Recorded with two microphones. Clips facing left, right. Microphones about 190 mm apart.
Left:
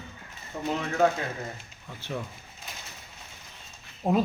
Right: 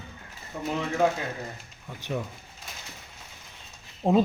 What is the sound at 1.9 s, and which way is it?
Speech, 15° right (ahead or behind).